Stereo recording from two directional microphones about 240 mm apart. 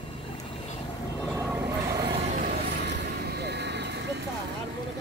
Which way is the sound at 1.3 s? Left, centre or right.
Centre.